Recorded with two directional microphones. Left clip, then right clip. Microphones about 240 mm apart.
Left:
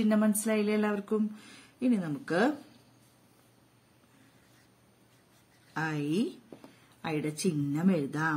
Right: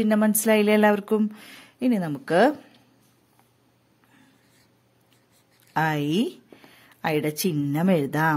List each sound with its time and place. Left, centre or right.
0.0 s a woman's voice: right
5.7 s a woman's voice: right